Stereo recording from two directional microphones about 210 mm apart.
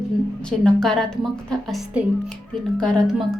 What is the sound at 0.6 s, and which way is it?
A woman's voice, 5° left (ahead or behind).